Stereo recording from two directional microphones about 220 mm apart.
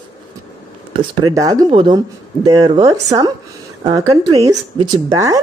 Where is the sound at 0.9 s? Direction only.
15° right (ahead or behind).